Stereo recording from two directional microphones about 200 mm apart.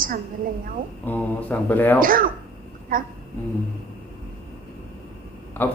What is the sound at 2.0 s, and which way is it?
A woman's voice, 45° right (ahead or behind).